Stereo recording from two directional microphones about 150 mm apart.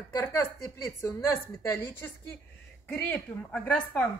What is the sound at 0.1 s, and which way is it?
A woman's voice, 20° left (ahead or behind).